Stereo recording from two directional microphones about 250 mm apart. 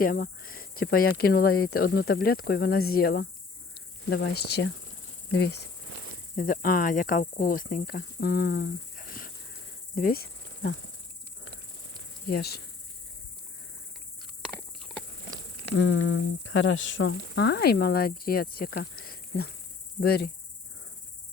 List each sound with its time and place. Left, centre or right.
0.0 s speech: left
6.3 s cricket: left
12.3 s speech: left
14.8 s horse: centre
15.7 s speech: left